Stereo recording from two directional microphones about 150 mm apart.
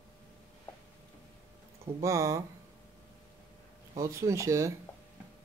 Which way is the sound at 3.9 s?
20° right (ahead or behind).